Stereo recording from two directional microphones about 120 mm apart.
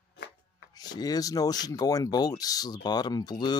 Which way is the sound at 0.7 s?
35° left (ahead or behind).